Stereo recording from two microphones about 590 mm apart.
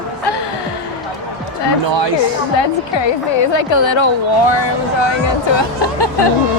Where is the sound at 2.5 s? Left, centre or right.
Left.